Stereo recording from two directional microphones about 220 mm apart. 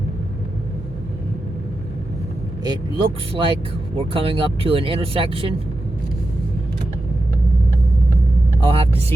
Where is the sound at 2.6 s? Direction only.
20° right (ahead or behind).